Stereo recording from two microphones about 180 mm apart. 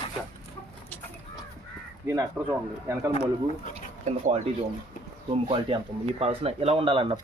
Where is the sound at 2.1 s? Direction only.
20° right (ahead or behind).